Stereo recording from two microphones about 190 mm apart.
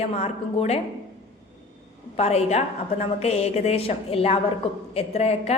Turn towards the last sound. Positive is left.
turn(degrees=35)  # may be behind; listen again after turning